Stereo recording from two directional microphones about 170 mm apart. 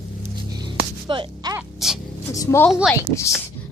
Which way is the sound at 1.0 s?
30° right (ahead or behind).